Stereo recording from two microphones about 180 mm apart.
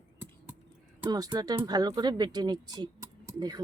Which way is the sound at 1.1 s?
20° right (ahead or behind).